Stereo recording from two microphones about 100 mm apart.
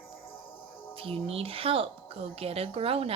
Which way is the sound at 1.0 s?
70° right (ahead or behind).